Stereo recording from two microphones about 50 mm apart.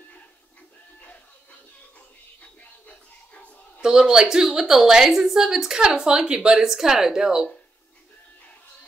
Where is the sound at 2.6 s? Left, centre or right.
Left.